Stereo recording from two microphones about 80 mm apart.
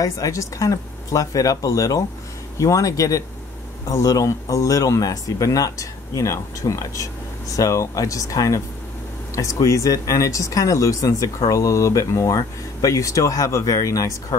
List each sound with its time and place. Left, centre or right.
0.0 s speech: left